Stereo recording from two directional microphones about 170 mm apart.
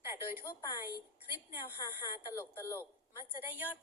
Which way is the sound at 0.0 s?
15° right (ahead or behind).